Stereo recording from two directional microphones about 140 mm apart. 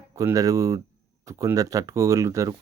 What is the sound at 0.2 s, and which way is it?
Speech, 25° right (ahead or behind).